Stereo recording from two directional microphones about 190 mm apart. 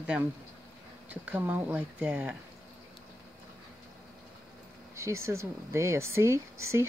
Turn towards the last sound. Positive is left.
turn(degrees=-15)  # may be behind; listen again after turning